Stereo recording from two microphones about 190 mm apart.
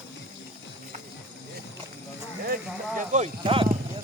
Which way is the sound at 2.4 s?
50° right (ahead or behind).